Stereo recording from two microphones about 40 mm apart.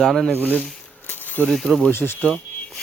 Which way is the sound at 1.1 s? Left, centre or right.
Left.